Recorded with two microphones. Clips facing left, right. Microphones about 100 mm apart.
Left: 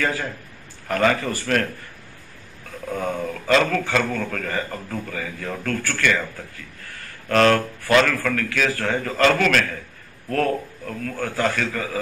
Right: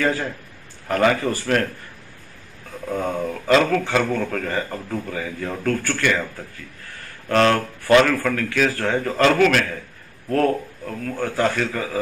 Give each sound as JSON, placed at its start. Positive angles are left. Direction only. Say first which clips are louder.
{"t": 0.8, "sound": "speech", "louder": "right 2 dB", "side_deg": -15}
{"t": 2.9, "sound": "speech", "louder": "right 2 dB", "side_deg": -10}
{"t": 7.2, "sound": "speech", "louder": "even", "side_deg": -15}